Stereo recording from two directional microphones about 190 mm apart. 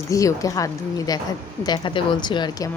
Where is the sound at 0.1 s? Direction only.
15° left (ahead or behind).